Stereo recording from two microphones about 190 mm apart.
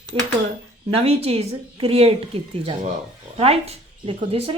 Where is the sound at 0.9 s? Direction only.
30° right (ahead or behind).